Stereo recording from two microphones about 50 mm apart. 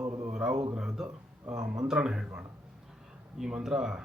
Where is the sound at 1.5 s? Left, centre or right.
Right.